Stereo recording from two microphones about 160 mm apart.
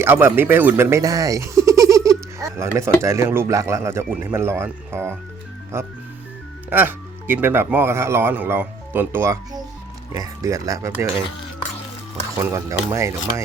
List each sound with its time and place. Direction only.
0.0 s speech: 15° right (ahead or behind)
12.4 s speech: 20° right (ahead or behind)